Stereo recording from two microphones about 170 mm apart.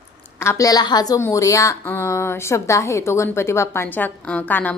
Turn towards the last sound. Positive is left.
turn(degrees=10)  # may be behind; listen again after turning